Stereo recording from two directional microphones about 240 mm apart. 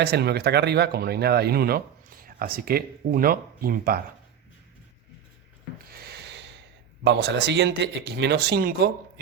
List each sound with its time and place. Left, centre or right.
0.0 s speech: right
5.9 s a sound: right
7.0 s speech: right